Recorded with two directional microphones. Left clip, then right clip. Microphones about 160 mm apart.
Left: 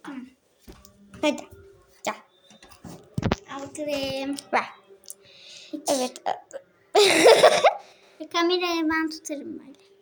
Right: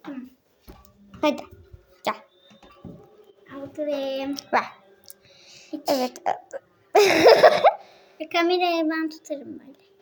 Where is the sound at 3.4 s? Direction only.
Centre (ahead or behind).